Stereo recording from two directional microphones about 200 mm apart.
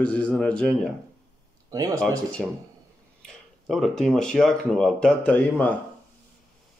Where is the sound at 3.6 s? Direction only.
Centre (ahead or behind).